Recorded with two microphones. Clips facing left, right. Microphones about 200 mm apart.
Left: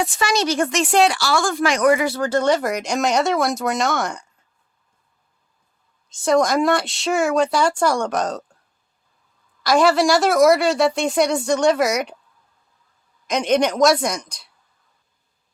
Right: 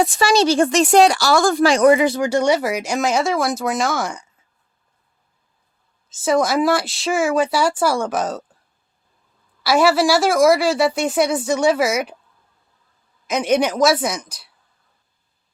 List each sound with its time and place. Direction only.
0.0 s speech: 35° right (ahead or behind); by 4.3 s 5° right (ahead or behind)
6.1 s speech: 5° right (ahead or behind)
9.6 s speech: 5° right (ahead or behind)
13.2 s speech: 5° right (ahead or behind)